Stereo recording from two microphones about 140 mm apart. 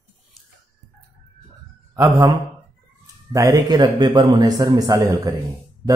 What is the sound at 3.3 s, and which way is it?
Speech, 25° right (ahead or behind).